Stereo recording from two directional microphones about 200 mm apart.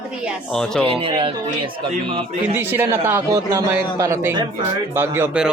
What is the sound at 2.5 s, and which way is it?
Speech, 10° right (ahead or behind).